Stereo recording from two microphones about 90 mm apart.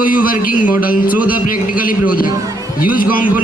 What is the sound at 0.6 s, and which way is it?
Speech, 20° right (ahead or behind).